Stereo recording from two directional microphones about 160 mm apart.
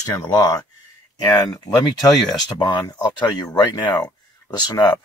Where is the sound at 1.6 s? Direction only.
25° left (ahead or behind).